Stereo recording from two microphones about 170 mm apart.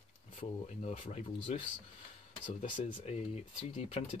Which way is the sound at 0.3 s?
50° left (ahead or behind).